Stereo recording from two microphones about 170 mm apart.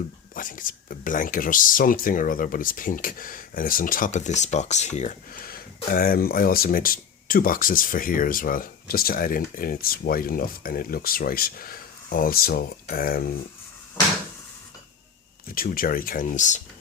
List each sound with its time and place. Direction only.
0.3 s speech: 50° left (ahead or behind)
15.5 s speech: 55° left (ahead or behind)